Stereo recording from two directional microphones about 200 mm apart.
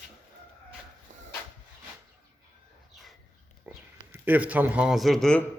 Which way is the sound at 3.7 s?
10° right (ahead or behind).